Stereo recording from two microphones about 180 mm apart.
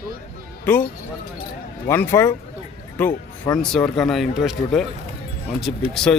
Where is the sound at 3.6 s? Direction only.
5° left (ahead or behind).